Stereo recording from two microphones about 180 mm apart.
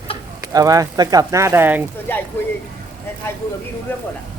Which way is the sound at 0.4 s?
20° right (ahead or behind).